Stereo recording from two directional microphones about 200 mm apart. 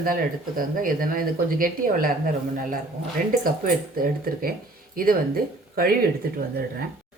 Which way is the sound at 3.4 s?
45° right (ahead or behind).